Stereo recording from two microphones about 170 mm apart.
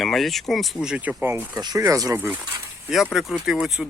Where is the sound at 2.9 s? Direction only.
Centre (ahead or behind).